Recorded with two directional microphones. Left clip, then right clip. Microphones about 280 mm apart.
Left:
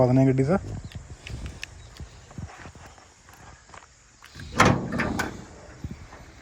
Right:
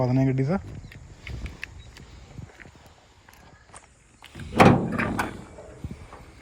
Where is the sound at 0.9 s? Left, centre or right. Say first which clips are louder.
Even; left.